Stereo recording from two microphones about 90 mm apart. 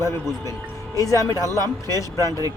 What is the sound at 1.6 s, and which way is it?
Speech, 45° right (ahead or behind).